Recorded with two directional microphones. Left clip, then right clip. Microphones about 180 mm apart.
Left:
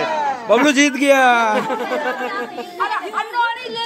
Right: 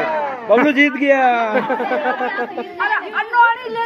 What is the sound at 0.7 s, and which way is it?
Speech, 20° left (ahead or behind).